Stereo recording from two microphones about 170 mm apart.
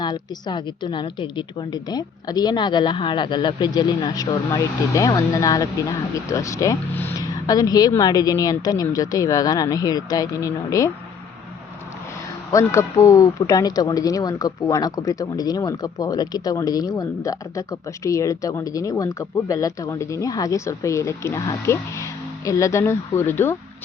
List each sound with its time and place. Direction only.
0.0 s speech: 25° left (ahead or behind)
12.5 s speech: 20° left (ahead or behind)